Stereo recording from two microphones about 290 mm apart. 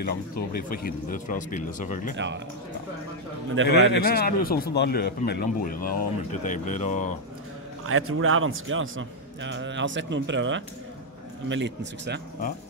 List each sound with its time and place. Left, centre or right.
0.0 s speech: left
2.1 s a man's voice: right
3.6 s a man's voice: right
3.9 s a man's voice: left
7.8 s a man's voice: right